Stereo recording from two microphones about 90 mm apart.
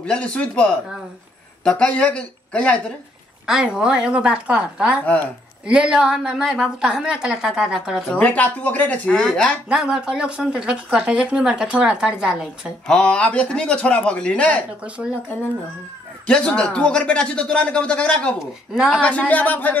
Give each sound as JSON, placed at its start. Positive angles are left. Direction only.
{"t": 0.0, "sound": "speech", "side_deg": 10}
{"t": 3.4, "sound": "a woman's voice", "side_deg": -10}
{"t": 8.1, "sound": "speech", "side_deg": 15}
{"t": 9.7, "sound": "a woman's voice", "side_deg": -5}
{"t": 12.8, "sound": "speech", "side_deg": 10}
{"t": 16.3, "sound": "speech", "side_deg": 10}